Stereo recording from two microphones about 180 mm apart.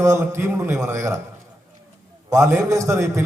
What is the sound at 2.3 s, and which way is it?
Speech, 15° right (ahead or behind).